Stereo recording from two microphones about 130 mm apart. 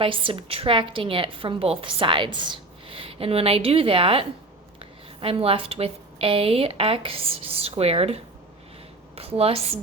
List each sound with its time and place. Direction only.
0.0 s a woman's voice: 40° right (ahead or behind)